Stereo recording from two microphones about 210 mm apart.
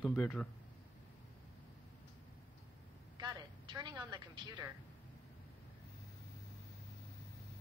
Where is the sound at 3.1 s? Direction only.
20° right (ahead or behind).